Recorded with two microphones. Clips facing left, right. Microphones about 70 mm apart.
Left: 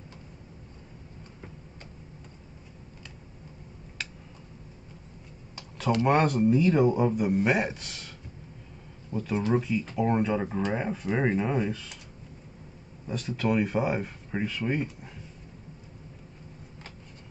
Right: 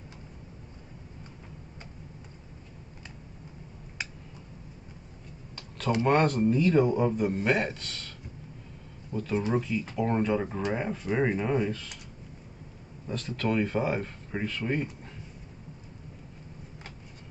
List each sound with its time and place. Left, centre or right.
4.0 s a sound: centre
6.0 s a man's voice: centre
9.1 s a man's voice: centre
13.0 s a man's voice: centre